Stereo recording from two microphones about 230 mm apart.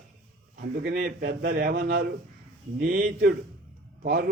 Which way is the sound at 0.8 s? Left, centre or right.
Right.